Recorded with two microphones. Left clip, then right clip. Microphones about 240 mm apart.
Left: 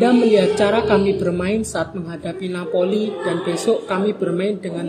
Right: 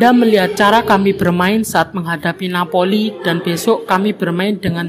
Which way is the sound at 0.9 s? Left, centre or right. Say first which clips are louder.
Right 4 dB; right.